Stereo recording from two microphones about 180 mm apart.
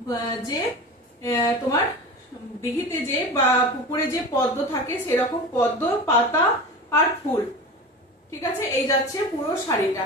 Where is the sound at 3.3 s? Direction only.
15° left (ahead or behind).